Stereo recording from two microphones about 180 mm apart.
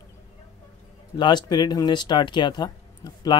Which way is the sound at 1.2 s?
25° left (ahead or behind).